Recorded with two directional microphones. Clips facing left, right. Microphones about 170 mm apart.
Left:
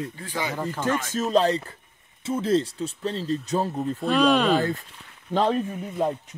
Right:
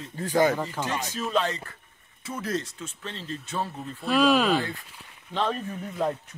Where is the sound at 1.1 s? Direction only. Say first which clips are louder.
Left 7 dB; 40° left (ahead or behind).